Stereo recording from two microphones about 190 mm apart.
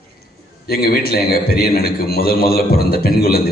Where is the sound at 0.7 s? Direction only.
55° left (ahead or behind).